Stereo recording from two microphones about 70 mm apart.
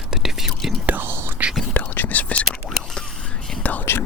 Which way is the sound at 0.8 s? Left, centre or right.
Right.